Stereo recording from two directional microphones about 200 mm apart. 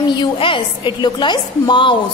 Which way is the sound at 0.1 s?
25° left (ahead or behind).